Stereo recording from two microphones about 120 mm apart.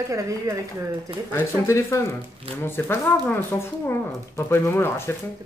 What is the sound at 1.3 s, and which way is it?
Speech, 20° left (ahead or behind).